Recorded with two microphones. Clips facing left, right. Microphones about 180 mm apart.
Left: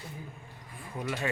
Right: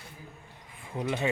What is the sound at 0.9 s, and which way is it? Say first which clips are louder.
Speech: right 4 dB; 20° right (ahead or behind).